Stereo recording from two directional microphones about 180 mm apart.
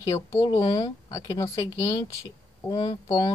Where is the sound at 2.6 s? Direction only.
20° left (ahead or behind).